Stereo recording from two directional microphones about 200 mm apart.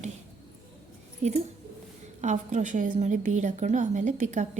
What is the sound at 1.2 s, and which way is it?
A woman's voice, 35° right (ahead or behind).